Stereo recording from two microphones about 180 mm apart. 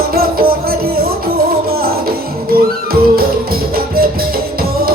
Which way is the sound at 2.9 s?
55° right (ahead or behind).